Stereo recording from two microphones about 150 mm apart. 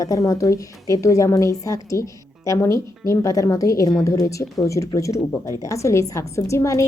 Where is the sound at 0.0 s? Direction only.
25° left (ahead or behind).